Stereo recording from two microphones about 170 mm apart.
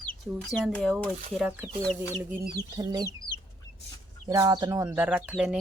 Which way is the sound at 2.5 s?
25° right (ahead or behind).